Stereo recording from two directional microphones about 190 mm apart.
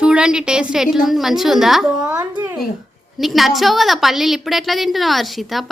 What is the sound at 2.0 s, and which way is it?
Speech, 15° right (ahead or behind).